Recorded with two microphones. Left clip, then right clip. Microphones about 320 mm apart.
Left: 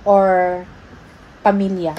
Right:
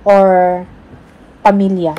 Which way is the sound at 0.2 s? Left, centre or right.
Right.